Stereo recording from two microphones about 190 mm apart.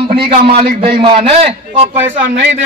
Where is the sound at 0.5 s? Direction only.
50° right (ahead or behind).